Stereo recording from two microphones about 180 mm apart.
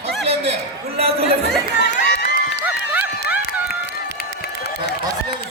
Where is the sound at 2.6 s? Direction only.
10° right (ahead or behind).